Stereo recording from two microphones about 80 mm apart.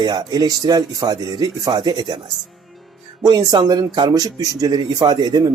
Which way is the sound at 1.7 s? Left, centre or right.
Right.